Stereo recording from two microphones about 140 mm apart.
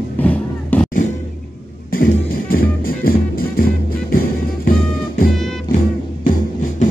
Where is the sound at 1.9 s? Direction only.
90° left.